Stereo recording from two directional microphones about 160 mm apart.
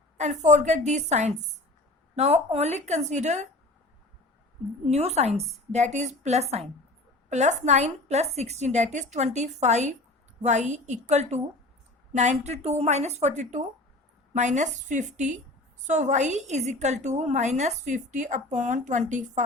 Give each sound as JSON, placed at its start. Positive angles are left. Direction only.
{"t": 0.2, "sound": "a woman's voice", "side_deg": -45}
{"t": 4.9, "sound": "a woman's voice", "side_deg": -40}